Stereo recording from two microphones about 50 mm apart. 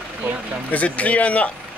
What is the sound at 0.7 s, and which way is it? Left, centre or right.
Speech, left.